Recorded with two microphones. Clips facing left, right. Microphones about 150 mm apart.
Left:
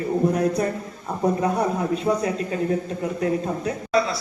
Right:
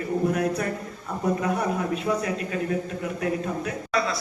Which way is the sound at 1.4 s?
30° left (ahead or behind).